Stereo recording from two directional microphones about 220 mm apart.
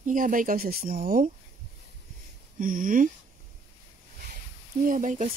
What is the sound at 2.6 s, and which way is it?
Speech, 40° right (ahead or behind).